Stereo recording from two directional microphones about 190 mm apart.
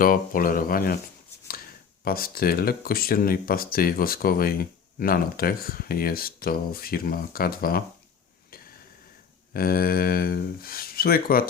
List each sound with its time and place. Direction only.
0.0 s speech: 50° left (ahead or behind)
2.0 s speech: 50° left (ahead or behind)
9.5 s speech: 50° left (ahead or behind)